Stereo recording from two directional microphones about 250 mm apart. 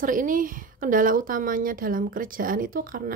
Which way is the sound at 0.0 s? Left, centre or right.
Right.